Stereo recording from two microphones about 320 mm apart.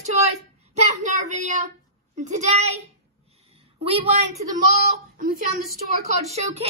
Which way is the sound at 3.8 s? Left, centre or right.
Centre.